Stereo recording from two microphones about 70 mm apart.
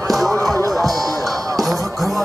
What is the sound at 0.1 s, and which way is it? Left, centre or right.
Music, centre.